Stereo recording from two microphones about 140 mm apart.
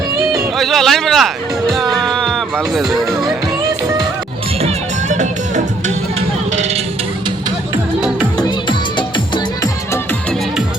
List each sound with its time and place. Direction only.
0.5 s speech: centre (ahead or behind)
4.6 s music: 60° right (ahead or behind)
6.1 s music: 50° right (ahead or behind)
8.4 s music: 30° left (ahead or behind)